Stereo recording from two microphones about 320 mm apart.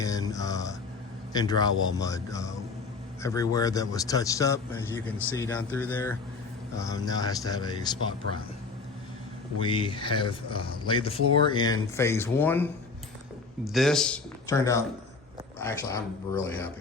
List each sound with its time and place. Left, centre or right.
0.0 s a sound: centre
1.3 s a man's voice: centre
9.6 s a man's voice: centre